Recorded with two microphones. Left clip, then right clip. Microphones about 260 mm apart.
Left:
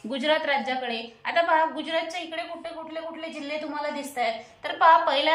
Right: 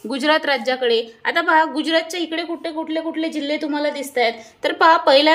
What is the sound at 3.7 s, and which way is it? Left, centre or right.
A woman's voice, right.